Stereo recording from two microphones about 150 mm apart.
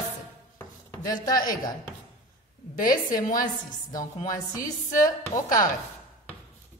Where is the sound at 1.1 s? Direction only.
25° left (ahead or behind).